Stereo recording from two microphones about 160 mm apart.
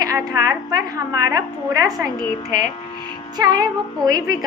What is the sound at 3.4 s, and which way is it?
Speech, 25° right (ahead or behind).